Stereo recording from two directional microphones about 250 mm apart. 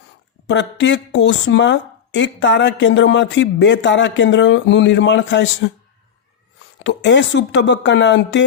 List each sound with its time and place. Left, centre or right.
0.4 s speech: left
6.8 s speech: left